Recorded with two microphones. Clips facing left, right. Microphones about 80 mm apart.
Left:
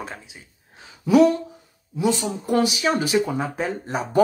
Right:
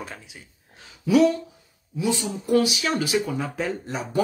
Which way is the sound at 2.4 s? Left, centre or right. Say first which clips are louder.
Right 1 dB; left.